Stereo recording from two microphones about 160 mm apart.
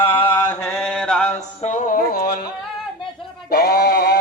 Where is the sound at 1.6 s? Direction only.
50° left (ahead or behind); by 2.5 s 70° left (ahead or behind).